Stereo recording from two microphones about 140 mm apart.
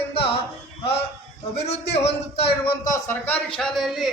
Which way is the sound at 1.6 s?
50° left (ahead or behind).